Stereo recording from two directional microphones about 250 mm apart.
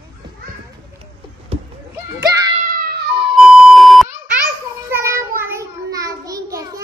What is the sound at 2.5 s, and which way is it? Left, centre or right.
Music, right.